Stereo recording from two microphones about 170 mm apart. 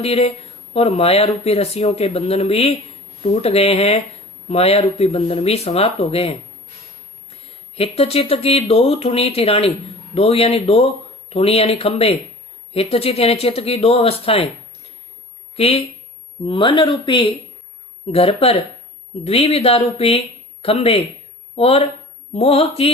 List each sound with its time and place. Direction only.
0.0 s speech: 35° left (ahead or behind)
7.8 s speech: 35° left (ahead or behind)
15.5 s speech: 35° left (ahead or behind)